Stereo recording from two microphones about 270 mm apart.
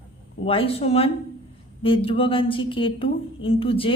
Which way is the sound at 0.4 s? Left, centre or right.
Left.